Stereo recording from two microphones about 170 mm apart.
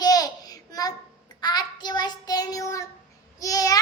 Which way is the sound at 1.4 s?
25° left (ahead or behind).